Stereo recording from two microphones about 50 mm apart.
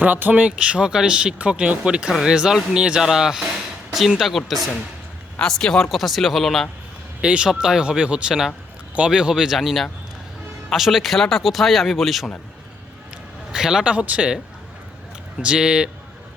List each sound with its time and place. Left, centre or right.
0.0 s speech: right
0.4 s speech: centre
5.4 s speech: centre
5.9 s speech: centre
7.2 s speech: centre
9.6 s speech: centre
13.5 s speech: centre
13.8 s speech: right
15.4 s speech: centre